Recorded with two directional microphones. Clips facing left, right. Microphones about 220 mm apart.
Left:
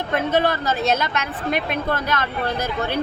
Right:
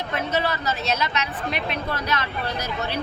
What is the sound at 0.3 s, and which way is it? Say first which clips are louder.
Speech: left 4 dB; 50° left (ahead or behind).